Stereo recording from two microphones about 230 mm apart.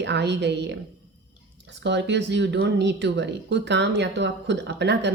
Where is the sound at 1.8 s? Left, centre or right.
Right.